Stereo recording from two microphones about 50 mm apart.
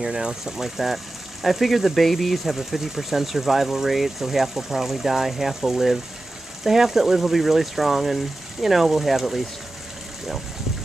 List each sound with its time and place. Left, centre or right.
0.0 s speech: centre